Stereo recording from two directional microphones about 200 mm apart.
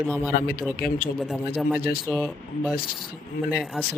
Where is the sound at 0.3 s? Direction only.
45° left (ahead or behind).